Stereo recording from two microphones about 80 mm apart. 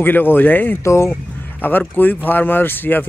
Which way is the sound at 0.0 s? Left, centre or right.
Left.